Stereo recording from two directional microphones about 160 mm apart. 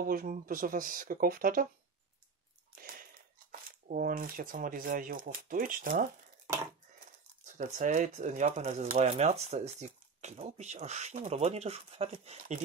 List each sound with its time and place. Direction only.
0.0 s speech: 65° right (ahead or behind)
2.7 s a sound: 65° right (ahead or behind)
3.8 s speech: 60° right (ahead or behind)
7.5 s speech: 50° right (ahead or behind)